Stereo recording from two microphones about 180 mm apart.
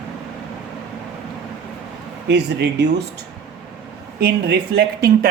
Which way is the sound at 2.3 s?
70° right (ahead or behind).